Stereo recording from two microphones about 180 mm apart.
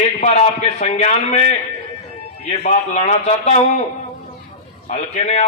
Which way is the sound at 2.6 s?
40° left (ahead or behind).